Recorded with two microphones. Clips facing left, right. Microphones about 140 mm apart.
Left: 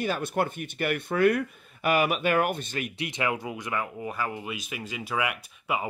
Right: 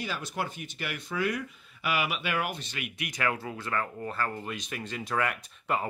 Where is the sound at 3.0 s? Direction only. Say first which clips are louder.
Left 1 dB; 20° left (ahead or behind).